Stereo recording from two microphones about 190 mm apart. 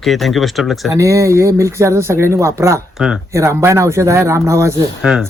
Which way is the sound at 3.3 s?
15° right (ahead or behind).